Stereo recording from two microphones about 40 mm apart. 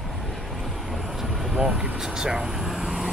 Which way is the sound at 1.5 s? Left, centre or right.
Centre.